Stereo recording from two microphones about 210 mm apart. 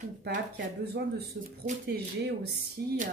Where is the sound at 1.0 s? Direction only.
50° right (ahead or behind).